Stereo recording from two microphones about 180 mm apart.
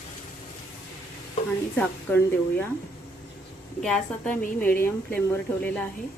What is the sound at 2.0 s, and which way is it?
Speech, 10° left (ahead or behind).